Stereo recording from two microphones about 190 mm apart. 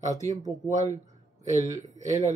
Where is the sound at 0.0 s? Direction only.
40° right (ahead or behind).